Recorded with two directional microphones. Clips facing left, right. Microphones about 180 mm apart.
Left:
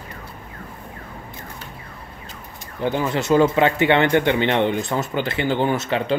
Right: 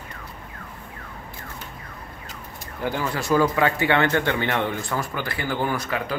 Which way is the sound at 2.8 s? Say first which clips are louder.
Left 5 dB; 20° left (ahead or behind).